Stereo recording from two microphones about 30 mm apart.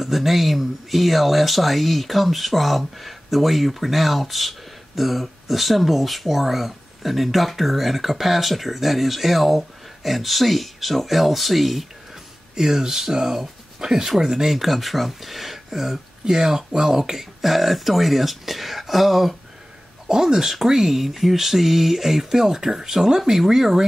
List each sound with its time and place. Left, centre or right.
0.0 s speech: centre
12.5 s speech: centre
20.1 s speech: centre